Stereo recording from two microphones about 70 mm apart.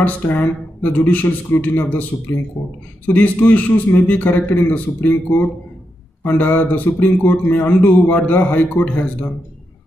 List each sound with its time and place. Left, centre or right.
0.0 s a man's voice: left